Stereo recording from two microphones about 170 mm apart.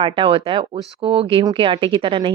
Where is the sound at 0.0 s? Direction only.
30° right (ahead or behind).